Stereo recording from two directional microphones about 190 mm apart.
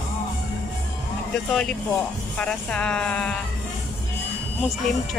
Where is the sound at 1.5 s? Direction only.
5° left (ahead or behind).